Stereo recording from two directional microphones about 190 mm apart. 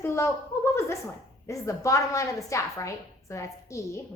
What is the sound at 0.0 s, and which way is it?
A woman's voice, 15° left (ahead or behind).